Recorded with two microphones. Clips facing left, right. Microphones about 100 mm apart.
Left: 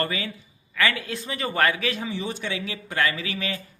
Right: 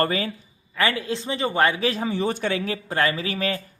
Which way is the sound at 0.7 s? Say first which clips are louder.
Right 2 dB; 30° right (ahead or behind).